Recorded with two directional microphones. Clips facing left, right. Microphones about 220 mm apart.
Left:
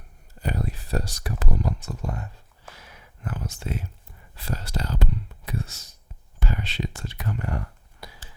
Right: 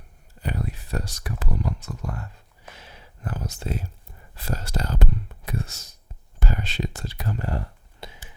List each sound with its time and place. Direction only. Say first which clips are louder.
0.4 s speech: left 1 dB; 35° left (ahead or behind)
2.7 s a sound: right 2 dB; 30° right (ahead or behind)
4.4 s speech: right 1 dB; 45° right (ahead or behind); by 8.2 s 25° right (ahead or behind)